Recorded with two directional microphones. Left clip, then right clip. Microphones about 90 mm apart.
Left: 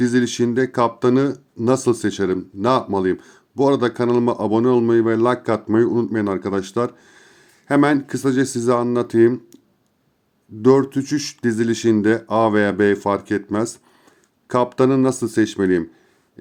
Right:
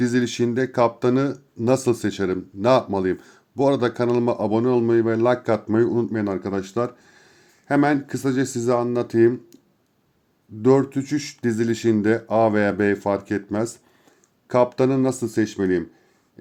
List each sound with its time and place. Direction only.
0.0 s speech: 15° left (ahead or behind)
6.1 s speech: 25° left (ahead or behind)
10.6 s speech: 30° left (ahead or behind)